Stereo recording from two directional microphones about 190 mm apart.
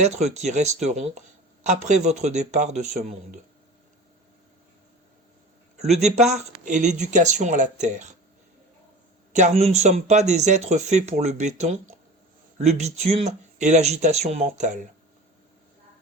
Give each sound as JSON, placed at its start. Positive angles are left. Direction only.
{"t": 0.0, "sound": "speech", "side_deg": -35}
{"t": 5.7, "sound": "speech", "side_deg": -35}
{"t": 9.3, "sound": "speech", "side_deg": -35}